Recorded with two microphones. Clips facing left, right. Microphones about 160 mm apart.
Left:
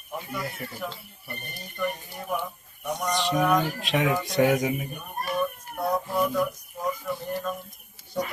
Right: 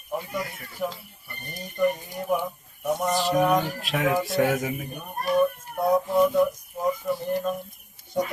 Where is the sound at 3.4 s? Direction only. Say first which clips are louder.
Even; 20° right (ahead or behind).